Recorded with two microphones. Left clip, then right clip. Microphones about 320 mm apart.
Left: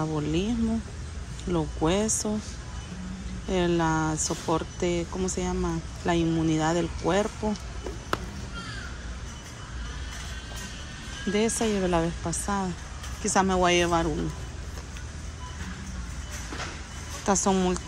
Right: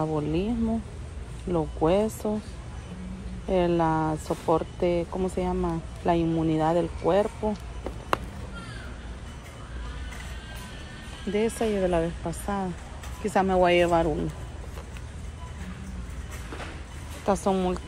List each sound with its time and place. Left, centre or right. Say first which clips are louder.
0.0 s speech: right 1 dB; centre
3.4 s speech: right 2 dB; centre
11.3 s speech: right 1 dB; centre
17.3 s speech: even; centre